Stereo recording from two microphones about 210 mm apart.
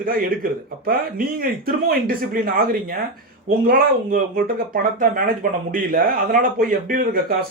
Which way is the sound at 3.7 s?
45° right (ahead or behind).